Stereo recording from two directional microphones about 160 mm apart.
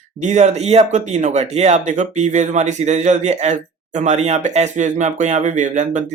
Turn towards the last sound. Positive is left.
turn(degrees=-50)  # may be behind; listen again after turning